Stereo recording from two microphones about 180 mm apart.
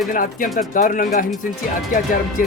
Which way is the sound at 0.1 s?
50° left (ahead or behind).